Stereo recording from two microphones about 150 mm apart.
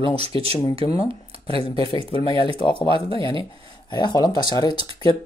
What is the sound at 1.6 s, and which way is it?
Speech, 35° left (ahead or behind).